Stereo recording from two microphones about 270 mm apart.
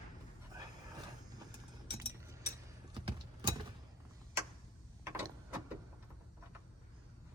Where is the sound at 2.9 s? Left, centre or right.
Centre.